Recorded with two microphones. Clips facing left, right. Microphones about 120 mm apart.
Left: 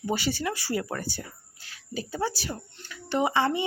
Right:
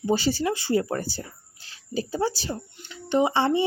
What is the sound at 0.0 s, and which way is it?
Speech, 30° right (ahead or behind).